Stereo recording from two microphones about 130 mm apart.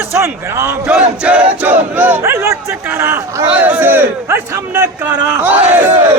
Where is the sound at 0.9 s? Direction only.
10° right (ahead or behind).